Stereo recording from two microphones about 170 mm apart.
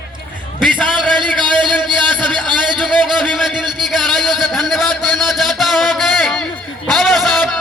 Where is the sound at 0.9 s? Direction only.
30° right (ahead or behind).